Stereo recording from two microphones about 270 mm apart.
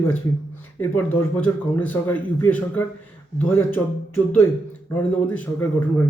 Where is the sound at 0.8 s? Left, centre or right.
Centre.